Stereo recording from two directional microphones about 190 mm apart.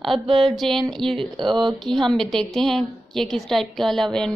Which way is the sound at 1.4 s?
25° right (ahead or behind).